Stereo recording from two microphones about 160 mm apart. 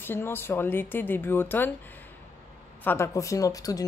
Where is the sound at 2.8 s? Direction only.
15° left (ahead or behind).